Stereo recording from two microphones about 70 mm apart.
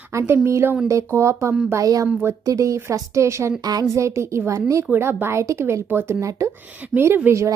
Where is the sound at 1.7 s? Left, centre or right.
Right.